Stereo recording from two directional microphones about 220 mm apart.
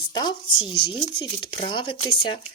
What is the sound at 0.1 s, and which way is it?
Speech, 20° left (ahead or behind).